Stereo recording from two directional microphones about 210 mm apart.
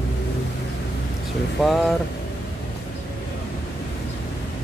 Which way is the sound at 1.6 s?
Centre (ahead or behind).